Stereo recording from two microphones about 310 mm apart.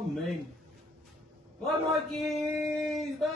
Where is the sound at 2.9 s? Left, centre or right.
Centre.